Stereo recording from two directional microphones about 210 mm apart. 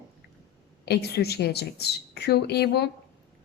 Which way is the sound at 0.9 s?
50° left (ahead or behind).